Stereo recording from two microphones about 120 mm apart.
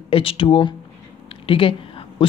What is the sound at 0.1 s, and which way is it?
Speech, 50° left (ahead or behind).